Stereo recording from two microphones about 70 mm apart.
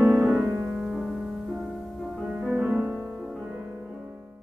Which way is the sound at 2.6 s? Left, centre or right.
Right.